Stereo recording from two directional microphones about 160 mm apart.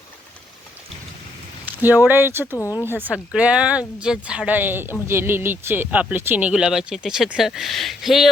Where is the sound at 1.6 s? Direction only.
10° right (ahead or behind).